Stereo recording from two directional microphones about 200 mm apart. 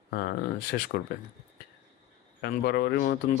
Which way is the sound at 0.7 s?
55° left (ahead or behind).